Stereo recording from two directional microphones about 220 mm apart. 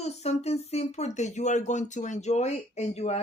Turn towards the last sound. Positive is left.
turn(degrees=30)  # may be behind; listen again after turning